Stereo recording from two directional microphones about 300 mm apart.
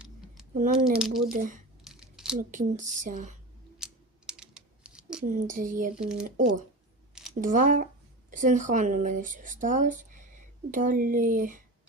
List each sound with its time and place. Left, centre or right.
0.5 s speech: right
0.9 s speech: centre
1.3 s speech: right
1.8 s a sound: centre
2.4 s speech: right
3.8 s typing: centre
5.2 s speech: right
6.0 s speech: centre
7.3 s speech: right